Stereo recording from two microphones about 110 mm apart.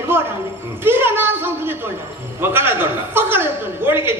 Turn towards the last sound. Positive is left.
turn(degrees=-20)  # may be behind; listen again after turning